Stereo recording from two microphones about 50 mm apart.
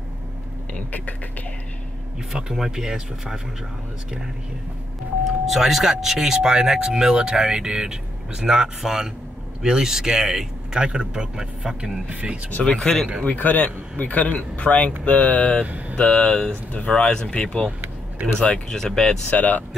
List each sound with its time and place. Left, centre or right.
0.7 s speech: left
2.5 s speech: centre
5.2 s speech: centre
12.1 s speech: right
12.6 s speech: centre
13.2 s speech: left; by 19.1 s centre
19.3 s speech: left